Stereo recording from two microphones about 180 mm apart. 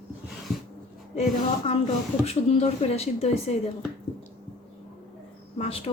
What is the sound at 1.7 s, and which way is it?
Speech, 35° left (ahead or behind).